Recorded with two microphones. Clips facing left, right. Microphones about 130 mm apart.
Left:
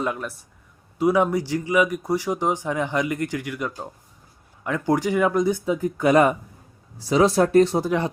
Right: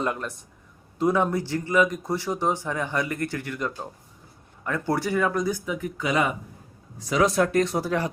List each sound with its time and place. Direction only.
0.0 s speech: 5° left (ahead or behind); by 5.9 s 30° left (ahead or behind)
6.0 s speech: 50° left (ahead or behind)
7.1 s speech: 30° left (ahead or behind)
7.8 s speech: 20° left (ahead or behind)